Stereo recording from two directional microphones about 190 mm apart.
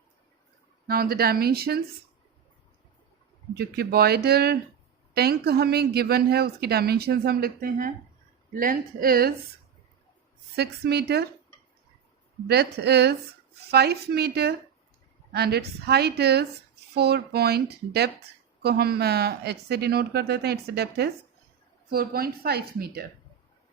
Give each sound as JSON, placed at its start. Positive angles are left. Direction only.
{"t": 0.9, "sound": "speech", "side_deg": -55}
{"t": 3.6, "sound": "speech", "side_deg": -55}
{"t": 10.5, "sound": "speech", "side_deg": -60}
{"t": 12.5, "sound": "speech", "side_deg": -60}